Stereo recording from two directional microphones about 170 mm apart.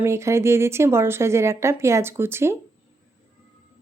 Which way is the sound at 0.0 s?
15° right (ahead or behind).